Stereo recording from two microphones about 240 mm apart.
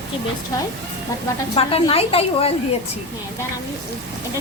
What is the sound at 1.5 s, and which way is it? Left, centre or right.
Speech, left.